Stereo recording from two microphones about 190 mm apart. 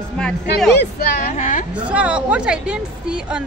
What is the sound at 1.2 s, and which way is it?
Speech, 40° left (ahead or behind).